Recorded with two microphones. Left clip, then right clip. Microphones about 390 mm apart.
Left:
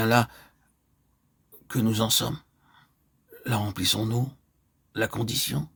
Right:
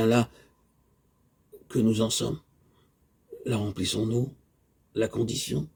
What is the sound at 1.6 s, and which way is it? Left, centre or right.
Speech, left.